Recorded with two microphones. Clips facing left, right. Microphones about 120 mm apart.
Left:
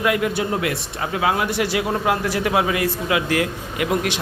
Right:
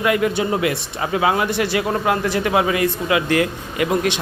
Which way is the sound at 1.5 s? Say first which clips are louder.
Right 1 dB; 10° left (ahead or behind).